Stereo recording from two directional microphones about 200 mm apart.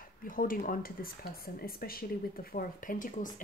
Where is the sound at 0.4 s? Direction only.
45° left (ahead or behind).